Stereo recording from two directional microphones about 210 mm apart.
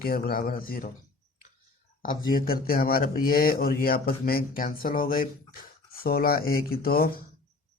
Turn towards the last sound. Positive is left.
turn(degrees=45)  # may be behind; listen again after turning